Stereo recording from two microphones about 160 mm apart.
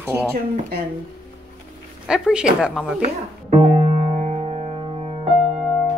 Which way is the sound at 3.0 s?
40° right (ahead or behind).